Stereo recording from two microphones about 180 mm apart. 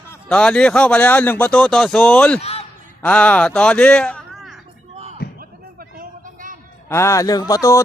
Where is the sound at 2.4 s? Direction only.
35° left (ahead or behind).